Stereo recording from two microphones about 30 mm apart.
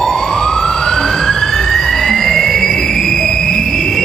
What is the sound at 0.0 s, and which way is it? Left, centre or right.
Emergency vehicle, centre.